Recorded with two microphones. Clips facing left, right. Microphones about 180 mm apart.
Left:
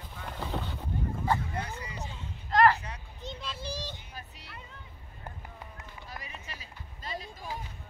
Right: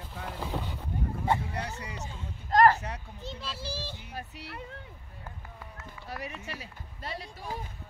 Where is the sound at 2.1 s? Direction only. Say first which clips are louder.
Right 3 dB; 45° right (ahead or behind).